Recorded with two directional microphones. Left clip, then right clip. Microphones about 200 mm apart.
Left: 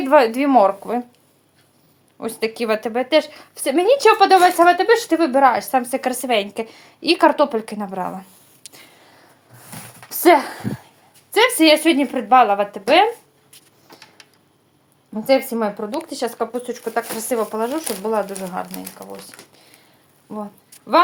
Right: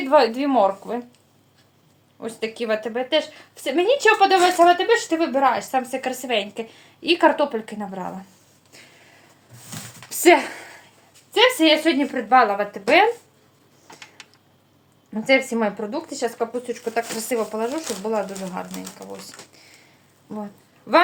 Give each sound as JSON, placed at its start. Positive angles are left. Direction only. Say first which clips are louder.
{"t": 0.0, "sound": "a woman's voice", "louder": "left 3 dB", "side_deg": 40}
{"t": 2.1, "sound": "speech", "louder": "left 5 dB", "side_deg": 40}
{"t": 10.3, "sound": "speech", "louder": "left 3 dB", "side_deg": 25}
{"t": 11.3, "sound": "speech", "louder": "left 2 dB", "side_deg": 45}
{"t": 15.3, "sound": "speech", "louder": "left 1 dB", "side_deg": 20}